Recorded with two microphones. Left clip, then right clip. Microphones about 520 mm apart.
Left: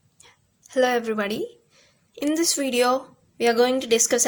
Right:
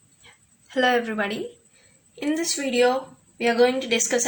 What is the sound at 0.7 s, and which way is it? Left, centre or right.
A woman's voice, left.